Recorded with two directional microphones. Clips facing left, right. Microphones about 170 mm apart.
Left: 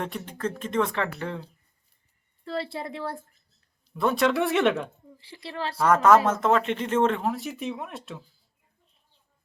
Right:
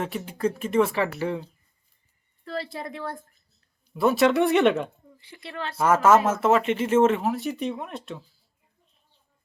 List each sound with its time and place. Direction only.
0.0 s speech: 5° right (ahead or behind)
2.4 s a woman's voice: 30° left (ahead or behind)
3.9 s speech: 5° right (ahead or behind)
5.1 s a woman's voice: 30° left (ahead or behind)
5.8 s speech: 5° right (ahead or behind)